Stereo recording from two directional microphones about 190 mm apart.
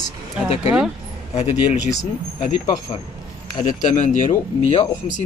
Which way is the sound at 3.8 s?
40° left (ahead or behind).